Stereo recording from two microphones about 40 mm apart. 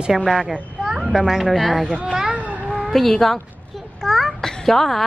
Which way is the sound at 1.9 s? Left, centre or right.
Right.